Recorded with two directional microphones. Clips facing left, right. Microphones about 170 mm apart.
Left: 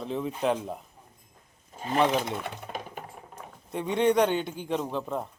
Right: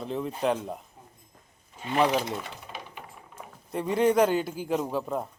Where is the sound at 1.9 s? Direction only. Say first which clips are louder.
Even; centre (ahead or behind).